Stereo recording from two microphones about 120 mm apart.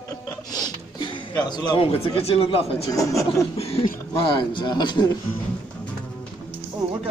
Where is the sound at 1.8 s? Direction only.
50° left (ahead or behind).